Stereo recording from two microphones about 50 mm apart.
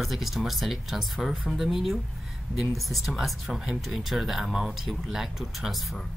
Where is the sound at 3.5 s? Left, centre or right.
Centre.